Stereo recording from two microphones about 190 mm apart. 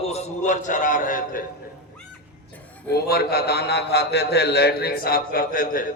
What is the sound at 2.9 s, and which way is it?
A man's voice, 55° left (ahead or behind).